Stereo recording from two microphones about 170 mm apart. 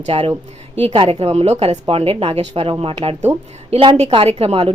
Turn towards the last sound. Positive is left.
turn(degrees=-35)  # may be behind; listen again after turning